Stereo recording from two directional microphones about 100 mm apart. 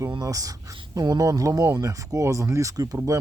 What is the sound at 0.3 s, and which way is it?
Speech, 35° right (ahead or behind).